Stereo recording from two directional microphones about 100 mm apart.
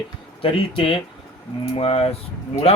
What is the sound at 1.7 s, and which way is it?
Speech, 80° left.